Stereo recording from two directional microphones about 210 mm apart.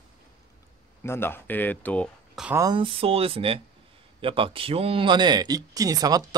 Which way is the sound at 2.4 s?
15° right (ahead or behind).